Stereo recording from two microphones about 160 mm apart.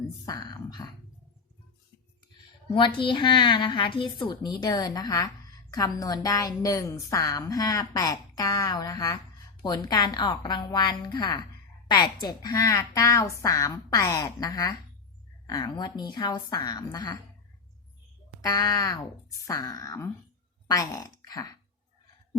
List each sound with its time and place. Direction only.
0.3 s a woman's voice: 25° left (ahead or behind)
2.7 s a woman's voice: 30° left (ahead or behind)
18.4 s a woman's voice: 20° left (ahead or behind)